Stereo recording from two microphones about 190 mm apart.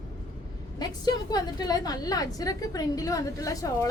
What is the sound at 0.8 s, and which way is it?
A woman's voice, 20° left (ahead or behind).